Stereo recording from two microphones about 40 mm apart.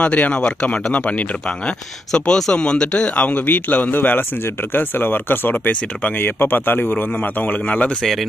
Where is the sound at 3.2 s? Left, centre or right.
Left.